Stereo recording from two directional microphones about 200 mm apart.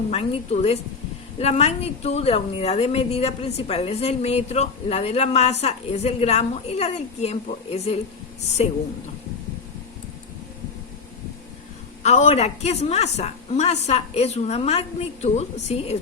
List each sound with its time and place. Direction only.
0.1 s a woman's voice: 30° left (ahead or behind)
12.0 s a woman's voice: 35° left (ahead or behind)